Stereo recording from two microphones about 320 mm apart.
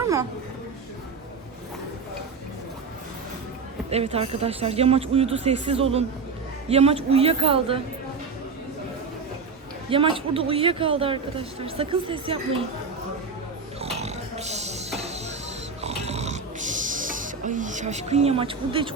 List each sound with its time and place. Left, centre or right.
3.8 s a woman's voice: centre
9.9 s a woman's voice: centre
13.8 s a sound: centre
15.8 s snoring: centre